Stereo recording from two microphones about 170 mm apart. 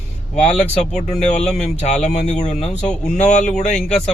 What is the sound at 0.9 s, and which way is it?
Speech, 40° left (ahead or behind).